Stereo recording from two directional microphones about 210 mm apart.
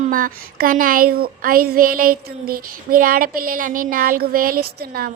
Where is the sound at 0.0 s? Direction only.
40° right (ahead or behind).